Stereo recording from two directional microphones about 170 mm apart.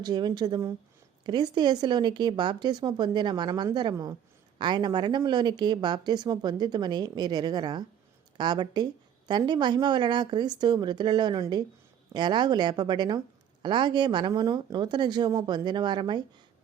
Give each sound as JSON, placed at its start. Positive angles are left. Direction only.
{"t": 0.0, "sound": "a woman's voice", "side_deg": -25}